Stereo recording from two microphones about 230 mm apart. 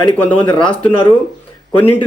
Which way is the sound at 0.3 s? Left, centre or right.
Left.